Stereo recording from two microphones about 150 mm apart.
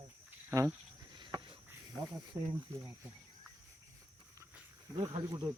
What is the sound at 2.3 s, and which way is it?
Speech, 15° right (ahead or behind).